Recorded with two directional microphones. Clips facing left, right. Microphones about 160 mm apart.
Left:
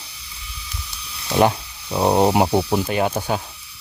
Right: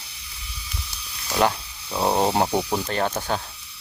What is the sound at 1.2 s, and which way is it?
Speech, 25° left (ahead or behind).